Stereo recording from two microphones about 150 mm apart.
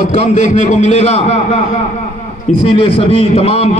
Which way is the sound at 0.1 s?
50° left (ahead or behind).